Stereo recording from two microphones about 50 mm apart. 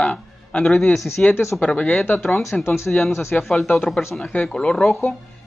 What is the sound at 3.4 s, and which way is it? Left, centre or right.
Speech, centre.